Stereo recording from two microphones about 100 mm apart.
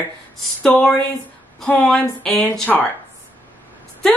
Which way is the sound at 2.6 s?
20° left (ahead or behind).